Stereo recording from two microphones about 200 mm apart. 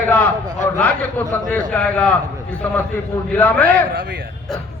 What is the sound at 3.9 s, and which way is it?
Speech, 60° right (ahead or behind).